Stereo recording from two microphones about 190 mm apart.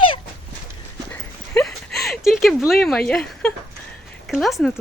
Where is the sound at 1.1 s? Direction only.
5° left (ahead or behind).